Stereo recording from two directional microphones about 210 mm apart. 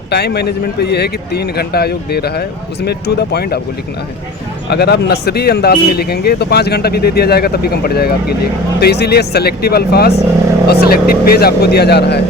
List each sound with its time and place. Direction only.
0.1 s speech: 50° left (ahead or behind)
4.7 s speech: 50° left (ahead or behind)